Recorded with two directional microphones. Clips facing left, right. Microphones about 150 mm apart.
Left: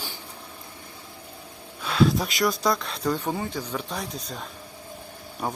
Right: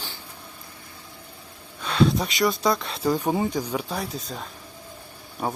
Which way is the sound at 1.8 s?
Centre (ahead or behind).